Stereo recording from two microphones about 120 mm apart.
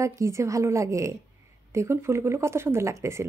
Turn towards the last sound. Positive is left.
turn(degrees=-25)  # may be behind; listen again after turning